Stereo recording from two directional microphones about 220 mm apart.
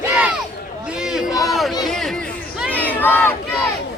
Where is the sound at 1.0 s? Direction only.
Centre (ahead or behind).